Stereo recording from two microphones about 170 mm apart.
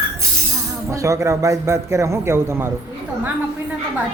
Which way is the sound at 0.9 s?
20° right (ahead or behind).